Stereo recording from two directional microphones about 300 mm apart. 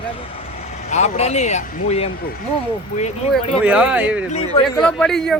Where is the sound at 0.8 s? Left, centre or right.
Left.